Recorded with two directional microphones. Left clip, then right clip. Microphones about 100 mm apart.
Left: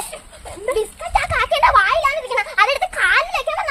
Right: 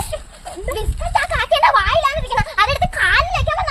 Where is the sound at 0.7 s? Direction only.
Centre (ahead or behind).